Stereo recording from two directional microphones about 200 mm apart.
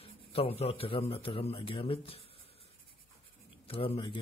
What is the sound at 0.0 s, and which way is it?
A man's voice, 30° left (ahead or behind).